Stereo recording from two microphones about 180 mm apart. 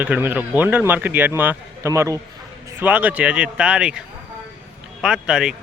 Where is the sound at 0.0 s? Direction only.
10° right (ahead or behind).